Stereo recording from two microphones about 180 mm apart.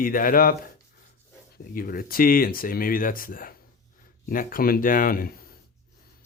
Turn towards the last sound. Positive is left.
turn(degrees=50)  # may be behind; listen again after turning